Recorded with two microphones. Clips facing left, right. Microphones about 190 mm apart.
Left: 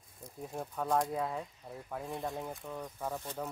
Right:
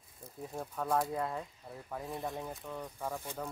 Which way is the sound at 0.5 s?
5° left (ahead or behind).